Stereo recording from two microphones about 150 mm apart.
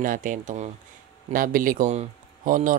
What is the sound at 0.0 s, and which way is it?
Speech, 65° right (ahead or behind).